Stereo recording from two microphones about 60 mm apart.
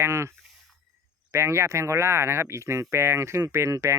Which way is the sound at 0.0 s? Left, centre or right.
Right.